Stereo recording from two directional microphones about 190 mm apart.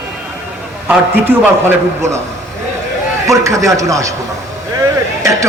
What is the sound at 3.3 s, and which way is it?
Speech, 15° right (ahead or behind).